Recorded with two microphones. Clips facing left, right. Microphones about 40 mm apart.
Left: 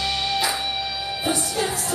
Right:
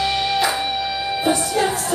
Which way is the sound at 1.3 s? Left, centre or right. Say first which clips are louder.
Right 5 dB; right.